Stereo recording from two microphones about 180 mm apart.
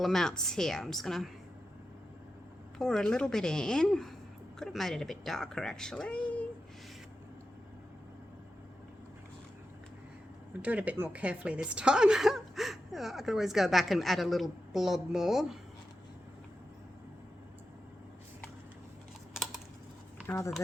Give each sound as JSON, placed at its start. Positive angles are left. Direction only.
{"t": 0.0, "sound": "a woman's voice", "side_deg": 0}
{"t": 2.7, "sound": "a woman's voice", "side_deg": 0}
{"t": 10.6, "sound": "a woman's voice", "side_deg": -10}
{"t": 20.2, "sound": "speech", "side_deg": 15}